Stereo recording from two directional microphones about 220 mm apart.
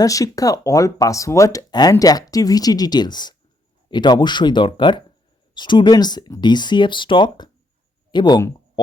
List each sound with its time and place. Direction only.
0.0 s speech: 15° left (ahead or behind)